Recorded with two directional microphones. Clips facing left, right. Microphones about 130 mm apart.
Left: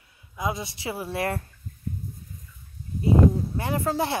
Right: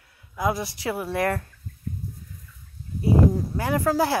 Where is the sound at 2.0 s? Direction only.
50° left (ahead or behind).